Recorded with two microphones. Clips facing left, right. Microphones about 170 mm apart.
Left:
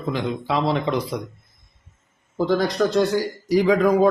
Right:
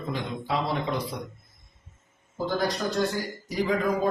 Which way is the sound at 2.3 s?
75° left (ahead or behind).